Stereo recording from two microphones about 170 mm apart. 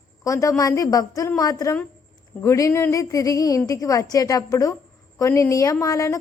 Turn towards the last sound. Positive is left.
turn(degrees=20)  # may be behind; listen again after turning